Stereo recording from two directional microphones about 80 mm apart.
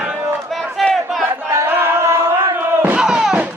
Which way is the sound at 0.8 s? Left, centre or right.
Centre.